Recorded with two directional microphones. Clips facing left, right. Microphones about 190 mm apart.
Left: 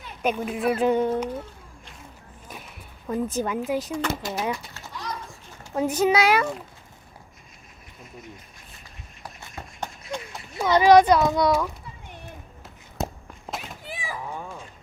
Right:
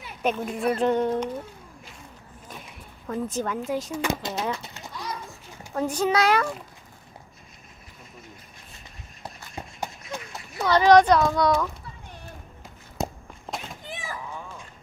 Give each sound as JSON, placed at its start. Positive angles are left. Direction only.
{"t": 0.2, "sound": "speech", "side_deg": 5}
{"t": 3.2, "sound": "speech", "side_deg": 5}
{"t": 4.0, "sound": "speech", "side_deg": -20}
{"t": 4.6, "sound": "children playing", "side_deg": -15}
{"t": 6.0, "sound": "speech", "side_deg": 5}
{"t": 9.6, "sound": "a sound", "side_deg": -5}
{"t": 10.6, "sound": "a child's voice", "side_deg": 10}
{"t": 13.0, "sound": "walk", "side_deg": 0}
{"t": 13.5, "sound": "a sound", "side_deg": 10}